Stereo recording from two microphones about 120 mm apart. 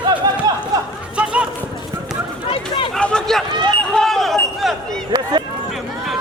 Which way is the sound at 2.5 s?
45° left (ahead or behind).